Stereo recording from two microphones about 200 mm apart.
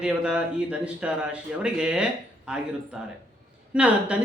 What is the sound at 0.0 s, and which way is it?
Speech, 5° right (ahead or behind).